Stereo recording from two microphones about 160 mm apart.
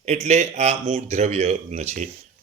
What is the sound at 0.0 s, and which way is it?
A man's voice, 45° right (ahead or behind).